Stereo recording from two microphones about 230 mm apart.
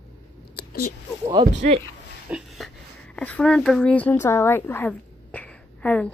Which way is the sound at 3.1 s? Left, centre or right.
Centre.